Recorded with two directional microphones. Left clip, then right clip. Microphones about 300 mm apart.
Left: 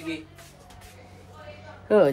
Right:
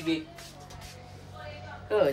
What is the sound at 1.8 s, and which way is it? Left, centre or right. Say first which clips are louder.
Speech: left 6 dB; centre.